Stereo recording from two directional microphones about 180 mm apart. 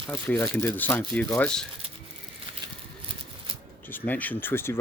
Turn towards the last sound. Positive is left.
turn(degrees=15)  # may be behind; listen again after turning